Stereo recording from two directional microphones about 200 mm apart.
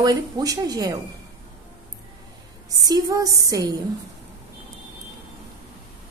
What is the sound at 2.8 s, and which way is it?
Speech, 20° right (ahead or behind).